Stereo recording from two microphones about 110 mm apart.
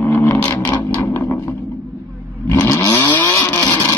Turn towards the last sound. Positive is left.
turn(degrees=30)  # may be behind; listen again after turning